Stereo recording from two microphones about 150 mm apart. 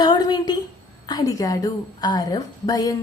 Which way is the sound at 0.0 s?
25° left (ahead or behind).